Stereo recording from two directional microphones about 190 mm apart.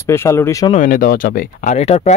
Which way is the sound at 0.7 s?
45° left (ahead or behind).